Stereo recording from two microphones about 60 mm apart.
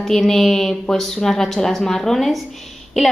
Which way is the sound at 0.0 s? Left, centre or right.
Centre.